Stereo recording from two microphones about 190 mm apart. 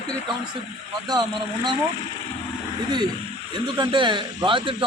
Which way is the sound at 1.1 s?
25° right (ahead or behind).